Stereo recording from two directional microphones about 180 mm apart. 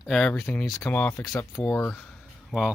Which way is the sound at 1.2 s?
20° left (ahead or behind).